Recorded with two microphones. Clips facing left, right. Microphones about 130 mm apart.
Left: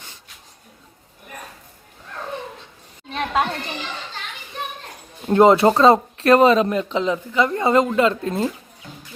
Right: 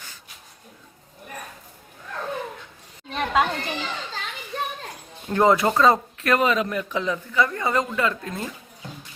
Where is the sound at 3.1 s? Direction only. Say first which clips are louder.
Even; 5° left (ahead or behind).